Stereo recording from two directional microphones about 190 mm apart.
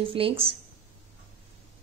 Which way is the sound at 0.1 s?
30° right (ahead or behind).